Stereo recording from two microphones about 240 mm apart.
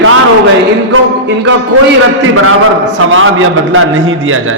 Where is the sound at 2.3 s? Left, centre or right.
Right.